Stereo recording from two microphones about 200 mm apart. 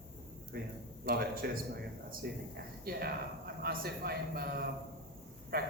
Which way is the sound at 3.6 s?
50° right (ahead or behind).